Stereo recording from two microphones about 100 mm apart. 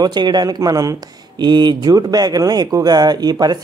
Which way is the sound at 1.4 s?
45° right (ahead or behind).